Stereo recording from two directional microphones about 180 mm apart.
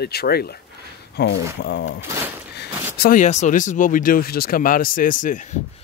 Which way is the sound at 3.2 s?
40° left (ahead or behind).